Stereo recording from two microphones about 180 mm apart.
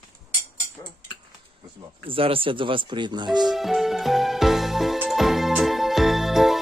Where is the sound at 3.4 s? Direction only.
Centre (ahead or behind).